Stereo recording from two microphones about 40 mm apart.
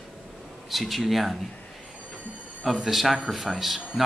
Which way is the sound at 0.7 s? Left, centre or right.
Centre.